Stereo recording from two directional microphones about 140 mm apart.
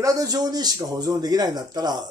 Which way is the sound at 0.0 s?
25° right (ahead or behind).